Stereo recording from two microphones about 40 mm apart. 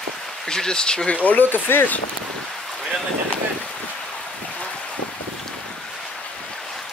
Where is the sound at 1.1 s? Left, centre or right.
Left.